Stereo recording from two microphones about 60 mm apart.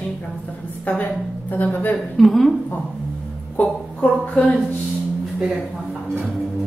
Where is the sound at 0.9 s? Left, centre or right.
Left.